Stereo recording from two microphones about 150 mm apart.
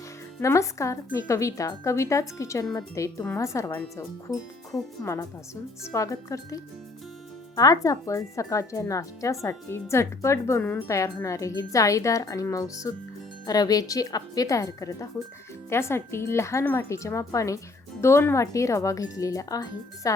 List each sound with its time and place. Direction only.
0.3 s speech: 20° left (ahead or behind)